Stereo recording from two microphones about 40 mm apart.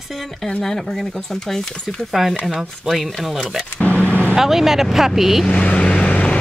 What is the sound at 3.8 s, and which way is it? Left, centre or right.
Vehicle, left.